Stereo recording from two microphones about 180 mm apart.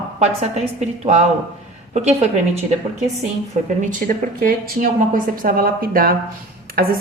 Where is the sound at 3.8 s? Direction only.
50° right (ahead or behind).